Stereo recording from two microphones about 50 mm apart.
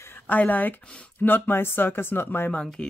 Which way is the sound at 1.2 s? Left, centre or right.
Left.